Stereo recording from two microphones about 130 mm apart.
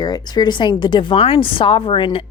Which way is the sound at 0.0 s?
30° left (ahead or behind).